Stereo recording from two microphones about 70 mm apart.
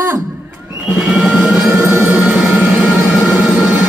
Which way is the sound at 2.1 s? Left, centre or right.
Centre.